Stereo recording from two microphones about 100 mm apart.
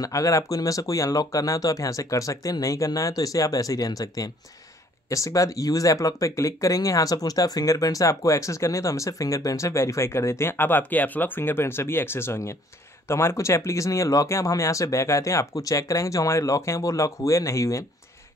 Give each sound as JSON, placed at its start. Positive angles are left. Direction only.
{"t": 0.0, "sound": "speech", "side_deg": 35}